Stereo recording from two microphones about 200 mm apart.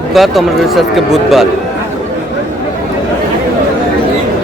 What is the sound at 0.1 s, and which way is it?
Speech, centre (ahead or behind).